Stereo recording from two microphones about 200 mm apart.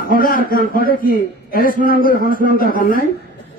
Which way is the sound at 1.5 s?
45° left (ahead or behind).